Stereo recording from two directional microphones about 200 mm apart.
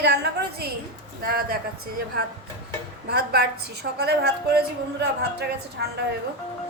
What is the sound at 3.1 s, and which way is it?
A woman's voice, 55° right (ahead or behind).